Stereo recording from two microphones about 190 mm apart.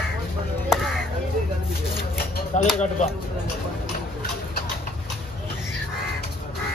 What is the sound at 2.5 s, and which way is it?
Speech, 40° left (ahead or behind).